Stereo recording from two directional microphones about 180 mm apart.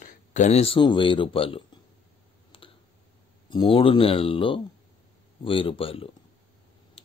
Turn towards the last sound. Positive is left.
turn(degrees=30)  # may be behind; listen again after turning